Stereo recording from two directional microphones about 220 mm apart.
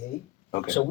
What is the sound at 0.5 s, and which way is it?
Speech, 30° left (ahead or behind).